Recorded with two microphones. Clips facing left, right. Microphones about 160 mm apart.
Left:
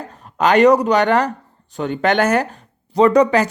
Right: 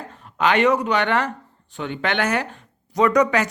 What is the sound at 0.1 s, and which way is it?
Speech, 40° left (ahead or behind).